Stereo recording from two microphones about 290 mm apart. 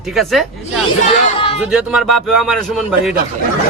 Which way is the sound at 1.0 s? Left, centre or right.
Left.